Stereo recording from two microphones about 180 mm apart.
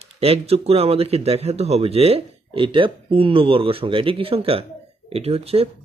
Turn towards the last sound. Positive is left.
turn(degrees=-35)  # may be behind; listen again after turning